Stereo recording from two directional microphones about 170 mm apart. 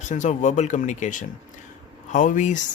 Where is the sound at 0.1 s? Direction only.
45° left (ahead or behind).